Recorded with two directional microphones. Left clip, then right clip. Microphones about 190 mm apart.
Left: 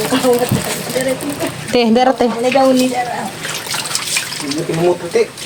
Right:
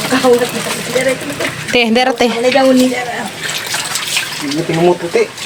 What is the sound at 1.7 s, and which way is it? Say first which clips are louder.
Speech: even; 10° left (ahead or behind).